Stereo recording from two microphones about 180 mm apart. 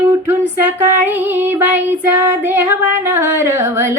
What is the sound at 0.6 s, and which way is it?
Music, 10° right (ahead or behind).